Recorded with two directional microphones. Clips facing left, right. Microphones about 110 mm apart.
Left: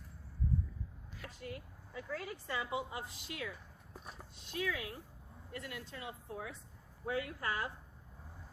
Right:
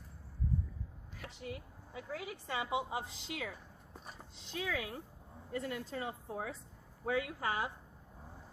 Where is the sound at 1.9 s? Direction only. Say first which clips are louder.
Even; 10° right (ahead or behind); by 3.5 s 30° right (ahead or behind).